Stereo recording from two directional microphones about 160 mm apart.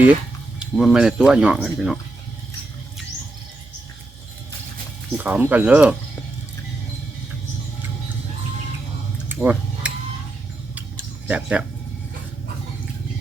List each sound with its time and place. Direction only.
0.6 s speech: 5° right (ahead or behind)
5.1 s speech: 10° right (ahead or behind)
9.3 s a sound: 10° right (ahead or behind)
11.3 s speech: 10° right (ahead or behind)